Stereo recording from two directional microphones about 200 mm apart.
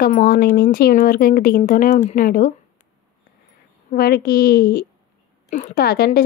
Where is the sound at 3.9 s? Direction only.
50° left (ahead or behind).